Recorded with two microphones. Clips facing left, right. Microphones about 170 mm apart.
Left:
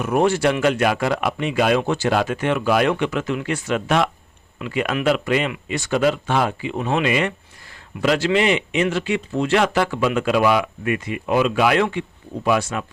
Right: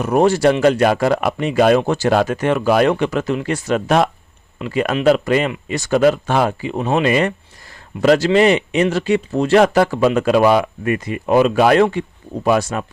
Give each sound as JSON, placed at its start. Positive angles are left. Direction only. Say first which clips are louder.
{"t": 0.0, "sound": "speech", "louder": "right 4 dB", "side_deg": -40}